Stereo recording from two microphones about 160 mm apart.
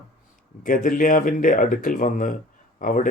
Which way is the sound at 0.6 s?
55° left (ahead or behind).